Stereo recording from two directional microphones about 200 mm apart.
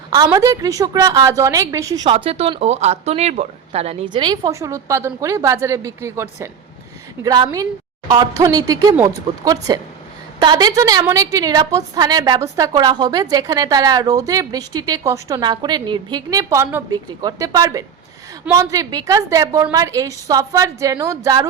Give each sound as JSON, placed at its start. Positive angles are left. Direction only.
{"t": 0.3, "sound": "a woman's voice", "side_deg": -15}
{"t": 2.1, "sound": "a woman's voice", "side_deg": -30}